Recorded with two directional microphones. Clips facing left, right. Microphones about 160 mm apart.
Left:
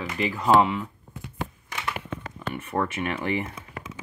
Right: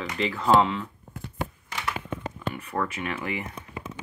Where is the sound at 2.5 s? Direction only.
25° left (ahead or behind).